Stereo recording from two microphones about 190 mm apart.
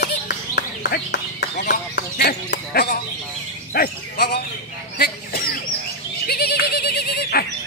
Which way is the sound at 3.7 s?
55° left (ahead or behind).